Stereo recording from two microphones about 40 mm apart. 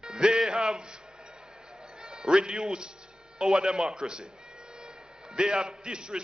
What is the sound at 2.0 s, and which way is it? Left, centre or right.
A man's voice, right.